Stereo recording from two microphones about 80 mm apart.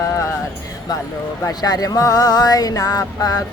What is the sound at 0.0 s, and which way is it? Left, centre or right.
Music, left.